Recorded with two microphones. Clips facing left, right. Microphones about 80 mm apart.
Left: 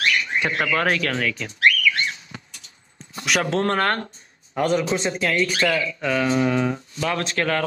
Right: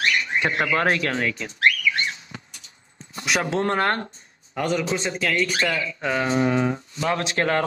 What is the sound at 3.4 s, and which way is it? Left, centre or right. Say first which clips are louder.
Speech: even; centre.